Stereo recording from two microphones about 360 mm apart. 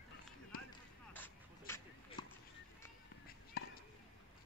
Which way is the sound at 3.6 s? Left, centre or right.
Left.